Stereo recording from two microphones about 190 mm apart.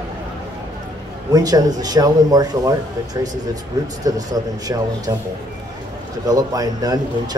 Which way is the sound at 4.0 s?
20° right (ahead or behind).